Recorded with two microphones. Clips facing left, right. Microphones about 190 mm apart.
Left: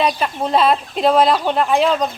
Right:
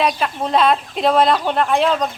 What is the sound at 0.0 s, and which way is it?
Speech, centre (ahead or behind).